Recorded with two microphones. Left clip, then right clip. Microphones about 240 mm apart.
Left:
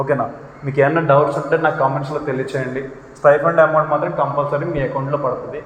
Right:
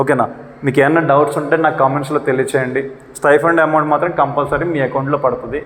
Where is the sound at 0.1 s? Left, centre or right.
Right.